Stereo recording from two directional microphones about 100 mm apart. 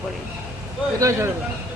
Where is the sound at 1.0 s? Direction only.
30° right (ahead or behind).